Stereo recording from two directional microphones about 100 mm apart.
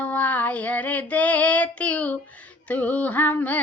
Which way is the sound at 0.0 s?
15° left (ahead or behind).